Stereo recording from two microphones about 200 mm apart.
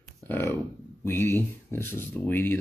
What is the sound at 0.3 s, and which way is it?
Speech, 10° left (ahead or behind).